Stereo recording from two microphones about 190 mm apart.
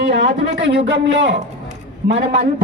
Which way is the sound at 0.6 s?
70° right (ahead or behind).